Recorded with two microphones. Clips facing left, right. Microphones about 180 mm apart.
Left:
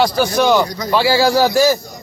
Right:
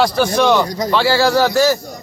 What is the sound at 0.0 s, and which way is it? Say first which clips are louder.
A man's voice: even; centre (ahead or behind).